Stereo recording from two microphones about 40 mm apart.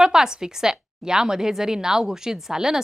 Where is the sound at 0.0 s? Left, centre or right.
Centre.